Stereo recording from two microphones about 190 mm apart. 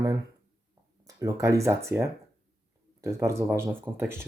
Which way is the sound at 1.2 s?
15° right (ahead or behind).